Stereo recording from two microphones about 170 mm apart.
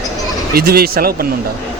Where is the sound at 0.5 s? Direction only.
65° right (ahead or behind).